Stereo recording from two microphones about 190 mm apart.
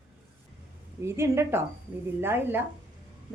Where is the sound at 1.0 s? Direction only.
15° right (ahead or behind).